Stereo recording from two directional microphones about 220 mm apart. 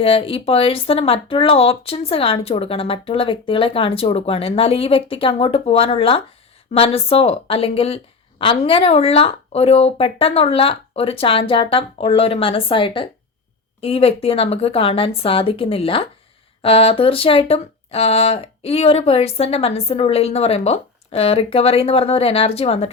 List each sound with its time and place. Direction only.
0.0 s a woman's voice: 25° left (ahead or behind)